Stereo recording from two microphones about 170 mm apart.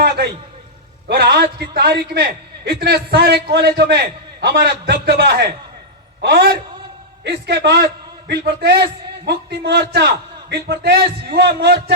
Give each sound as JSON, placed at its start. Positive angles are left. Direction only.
{"t": 1.0, "sound": "a man's voice", "side_deg": -75}
{"t": 7.3, "sound": "a man's voice", "side_deg": -85}